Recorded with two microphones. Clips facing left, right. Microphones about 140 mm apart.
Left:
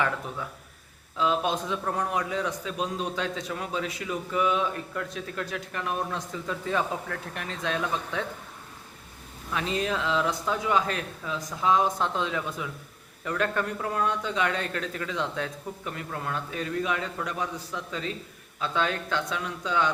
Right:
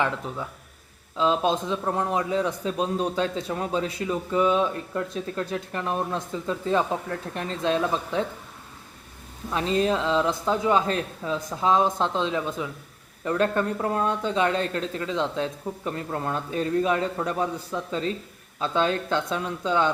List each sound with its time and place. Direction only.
1.1 s a man's voice: 30° right (ahead or behind)
9.5 s a man's voice: 35° right (ahead or behind)